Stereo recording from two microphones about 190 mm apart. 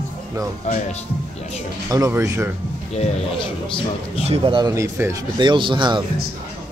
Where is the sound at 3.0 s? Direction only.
30° left (ahead or behind).